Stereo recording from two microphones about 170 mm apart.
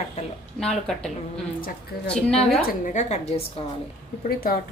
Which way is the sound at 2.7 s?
45° left (ahead or behind).